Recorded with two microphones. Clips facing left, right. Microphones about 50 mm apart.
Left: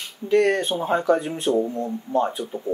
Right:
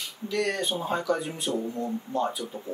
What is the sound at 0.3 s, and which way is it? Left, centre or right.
Speech, left.